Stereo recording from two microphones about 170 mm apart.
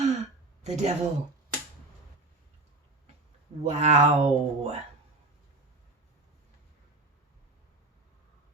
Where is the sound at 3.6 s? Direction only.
40° right (ahead or behind).